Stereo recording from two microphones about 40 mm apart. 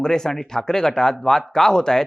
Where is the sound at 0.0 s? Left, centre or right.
Centre.